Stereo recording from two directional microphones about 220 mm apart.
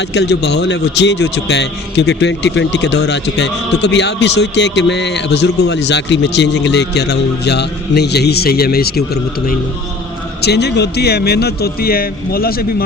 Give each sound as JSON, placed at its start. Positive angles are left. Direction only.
{"t": 0.1, "sound": "a man's voice", "side_deg": 50}
{"t": 10.4, "sound": "a man's voice", "side_deg": 50}